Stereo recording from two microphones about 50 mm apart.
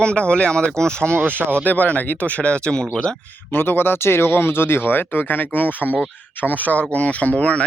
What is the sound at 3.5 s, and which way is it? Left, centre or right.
Speech, left.